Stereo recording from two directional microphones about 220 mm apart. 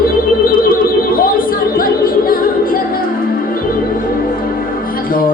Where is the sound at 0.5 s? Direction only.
40° left (ahead or behind).